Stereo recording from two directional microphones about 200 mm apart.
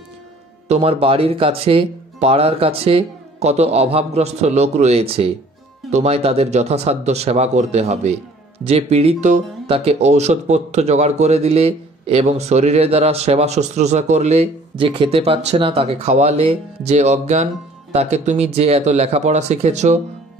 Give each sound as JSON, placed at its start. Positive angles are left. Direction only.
{"t": 0.7, "sound": "speech", "side_deg": -30}